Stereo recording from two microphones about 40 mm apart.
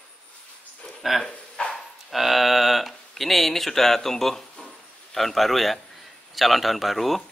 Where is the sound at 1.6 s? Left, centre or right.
Left.